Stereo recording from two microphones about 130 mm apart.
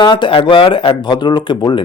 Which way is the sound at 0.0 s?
35° left (ahead or behind).